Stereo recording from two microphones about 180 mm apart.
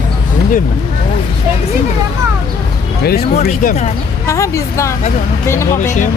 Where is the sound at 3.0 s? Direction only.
60° left (ahead or behind).